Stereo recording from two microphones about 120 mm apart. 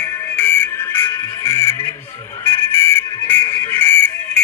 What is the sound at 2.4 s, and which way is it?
Whistle, 20° left (ahead or behind).